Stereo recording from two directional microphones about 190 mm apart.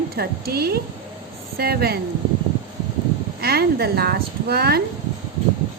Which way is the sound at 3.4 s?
55° right (ahead or behind).